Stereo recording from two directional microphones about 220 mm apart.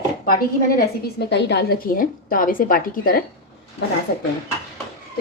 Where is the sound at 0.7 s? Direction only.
45° left (ahead or behind).